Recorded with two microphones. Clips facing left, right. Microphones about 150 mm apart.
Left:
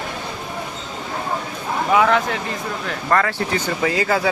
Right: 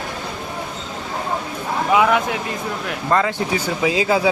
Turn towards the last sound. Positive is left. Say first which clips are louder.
# right 2 dB
turn(degrees=-15)  # may be behind; listen again after turning